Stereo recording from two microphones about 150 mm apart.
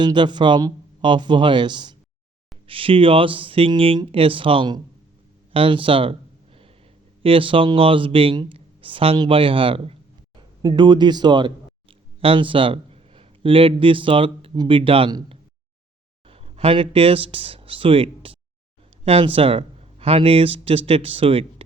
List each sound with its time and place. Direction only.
0.0 s speech: 30° right (ahead or behind)
5.5 s a sound: 35° right (ahead or behind)
7.2 s speech: 35° right (ahead or behind)
10.6 s speech: 30° right (ahead or behind)